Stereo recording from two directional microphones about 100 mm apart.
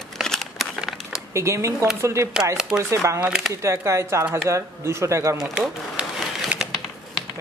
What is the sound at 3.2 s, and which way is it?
Speech, 5° right (ahead or behind).